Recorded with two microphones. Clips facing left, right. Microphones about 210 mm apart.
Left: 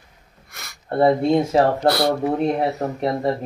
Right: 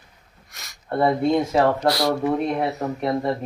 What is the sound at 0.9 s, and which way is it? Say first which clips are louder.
Speech: left 3 dB; 25° left (ahead or behind).